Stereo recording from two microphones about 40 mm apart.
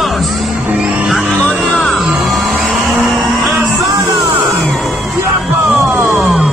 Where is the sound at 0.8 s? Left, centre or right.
Right.